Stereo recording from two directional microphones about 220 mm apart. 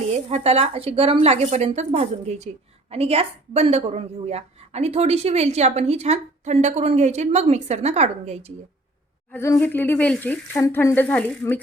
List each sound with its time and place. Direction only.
0.1 s a woman's voice: 30° right (ahead or behind)
9.3 s speech: 10° left (ahead or behind)